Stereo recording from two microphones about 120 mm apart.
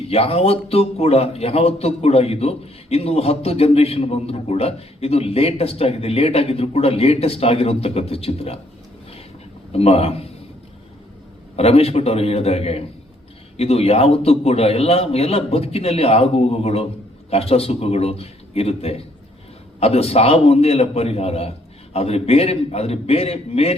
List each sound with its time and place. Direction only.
0.0 s a man's voice: 55° left (ahead or behind)
9.7 s a man's voice: 60° left (ahead or behind)
11.5 s a man's voice: 60° left (ahead or behind)